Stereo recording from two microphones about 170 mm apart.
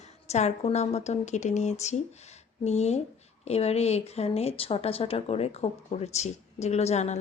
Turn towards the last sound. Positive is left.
turn(degrees=40)  # may be behind; listen again after turning